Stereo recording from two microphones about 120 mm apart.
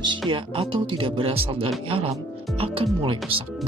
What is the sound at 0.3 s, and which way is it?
Speech, 45° right (ahead or behind).